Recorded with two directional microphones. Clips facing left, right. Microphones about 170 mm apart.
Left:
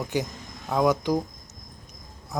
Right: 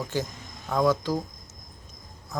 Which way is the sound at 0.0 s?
15° left (ahead or behind).